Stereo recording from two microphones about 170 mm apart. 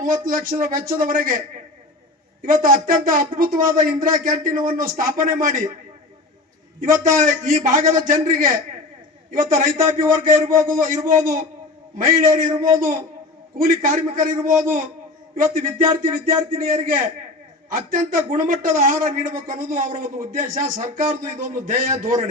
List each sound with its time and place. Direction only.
0.3 s speech: 55° right (ahead or behind)
2.4 s speech: 55° right (ahead or behind)
7.0 s speech: 50° right (ahead or behind)
13.6 s speech: 55° right (ahead or behind)